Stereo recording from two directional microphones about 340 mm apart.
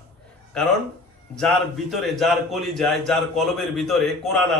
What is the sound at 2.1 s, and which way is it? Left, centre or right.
A man's voice, centre.